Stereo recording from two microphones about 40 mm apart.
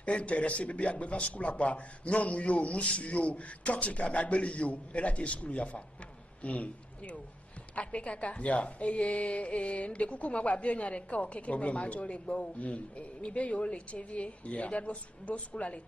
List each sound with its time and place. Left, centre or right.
0.0 s a woman's voice: left